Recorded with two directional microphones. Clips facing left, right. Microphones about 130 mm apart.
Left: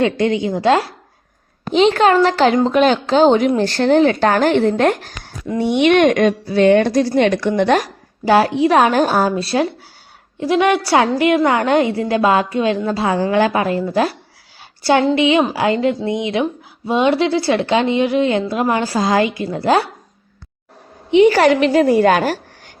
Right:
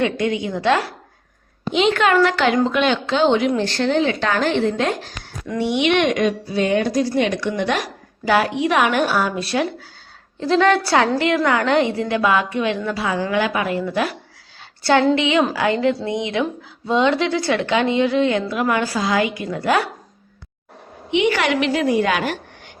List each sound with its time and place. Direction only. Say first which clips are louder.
0.0 s speech: left 4 dB; 30° left (ahead or behind)
1.7 s a woman's voice: left 4 dB; 35° left (ahead or behind)
8.2 s a woman's voice: left 5 dB; 35° left (ahead or behind)
10.5 s a woman's voice: left 2 dB; 15° left (ahead or behind); by 14.2 s 35° left (ahead or behind)
15.1 s speech: left 3 dB; 20° left (ahead or behind)
18.8 s a woman's voice: left 4 dB; 40° left (ahead or behind)
21.1 s a woman's voice: left 8 dB; 35° left (ahead or behind)